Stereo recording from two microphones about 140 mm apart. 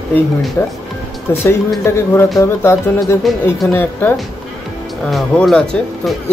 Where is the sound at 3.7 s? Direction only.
15° left (ahead or behind).